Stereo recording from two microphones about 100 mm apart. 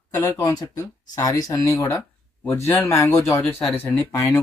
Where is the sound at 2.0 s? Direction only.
15° left (ahead or behind).